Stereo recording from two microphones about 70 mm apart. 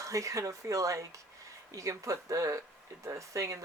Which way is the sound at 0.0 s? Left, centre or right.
Right.